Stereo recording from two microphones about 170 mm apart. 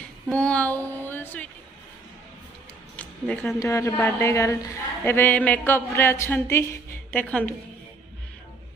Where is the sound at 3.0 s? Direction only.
10° left (ahead or behind).